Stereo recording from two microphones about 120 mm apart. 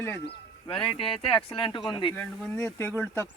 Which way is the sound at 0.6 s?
50° left (ahead or behind).